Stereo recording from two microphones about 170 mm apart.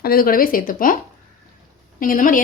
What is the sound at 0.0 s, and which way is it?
Speech, 60° left (ahead or behind).